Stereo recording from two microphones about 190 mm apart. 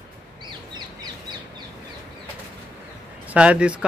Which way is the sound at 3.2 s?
5° right (ahead or behind).